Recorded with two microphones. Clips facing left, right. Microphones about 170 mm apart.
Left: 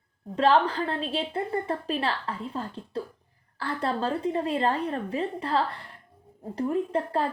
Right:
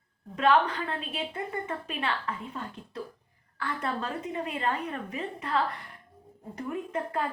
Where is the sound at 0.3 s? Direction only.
30° left (ahead or behind).